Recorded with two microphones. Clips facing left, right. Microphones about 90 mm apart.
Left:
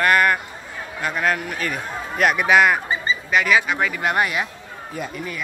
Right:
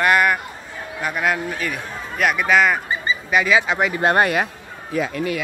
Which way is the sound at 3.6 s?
20° right (ahead or behind).